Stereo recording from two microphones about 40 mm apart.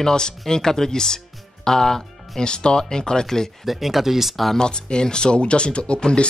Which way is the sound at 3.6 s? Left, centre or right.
Centre.